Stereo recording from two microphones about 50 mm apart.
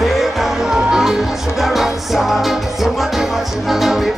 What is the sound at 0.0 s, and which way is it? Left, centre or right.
Music, centre.